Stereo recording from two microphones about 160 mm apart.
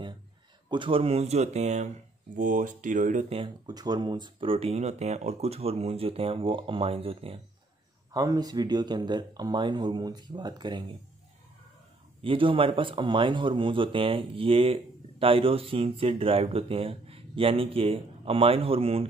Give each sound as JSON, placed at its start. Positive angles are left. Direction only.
{"t": 0.7, "sound": "speech", "side_deg": -30}
{"t": 3.3, "sound": "speech", "side_deg": -30}
{"t": 8.1, "sound": "speech", "side_deg": -25}
{"t": 12.2, "sound": "speech", "side_deg": -35}